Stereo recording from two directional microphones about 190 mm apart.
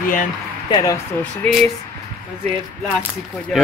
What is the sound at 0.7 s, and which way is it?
Speech, 20° left (ahead or behind).